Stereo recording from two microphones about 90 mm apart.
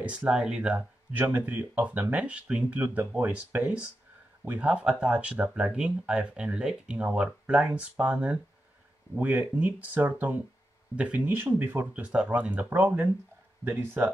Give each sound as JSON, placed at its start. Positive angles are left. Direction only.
{"t": 0.0, "sound": "speech", "side_deg": -10}